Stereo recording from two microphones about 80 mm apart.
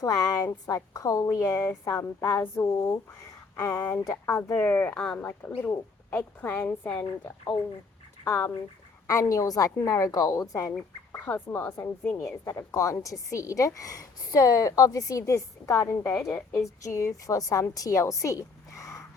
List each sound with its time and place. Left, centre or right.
0.0 s a woman's voice: left
2.6 s a woman's voice: left; by 5.2 s centre
5.2 s speech: left
8.2 s speech: left
9.3 s a woman's voice: left
10.6 s a woman's voice: left